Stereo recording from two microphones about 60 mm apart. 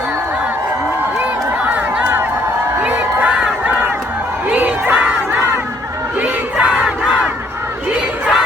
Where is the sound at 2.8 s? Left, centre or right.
Centre.